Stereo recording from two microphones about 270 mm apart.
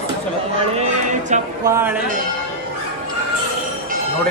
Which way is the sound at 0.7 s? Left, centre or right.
Right.